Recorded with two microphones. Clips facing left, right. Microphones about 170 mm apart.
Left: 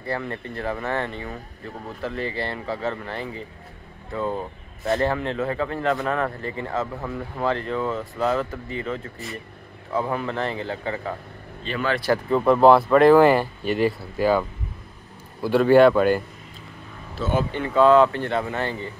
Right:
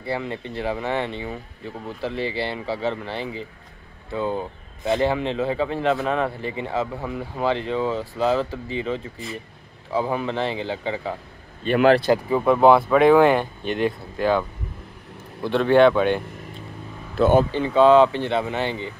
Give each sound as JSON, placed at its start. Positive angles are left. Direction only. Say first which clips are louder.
{"t": 0.2, "sound": "speech", "louder": "right 2 dB", "side_deg": -20}
{"t": 2.8, "sound": "speech", "louder": "right 2 dB", "side_deg": -20}
{"t": 11.6, "sound": "speech", "louder": "right 10 dB", "side_deg": -60}
{"t": 12.3, "sound": "speech", "louder": "left 1 dB", "side_deg": -5}
{"t": 15.4, "sound": "speech", "louder": "left 1 dB", "side_deg": 5}
{"t": 17.1, "sound": "speech", "louder": "right 7 dB", "side_deg": -55}
{"t": 17.5, "sound": "speech", "louder": "right 1 dB", "side_deg": -25}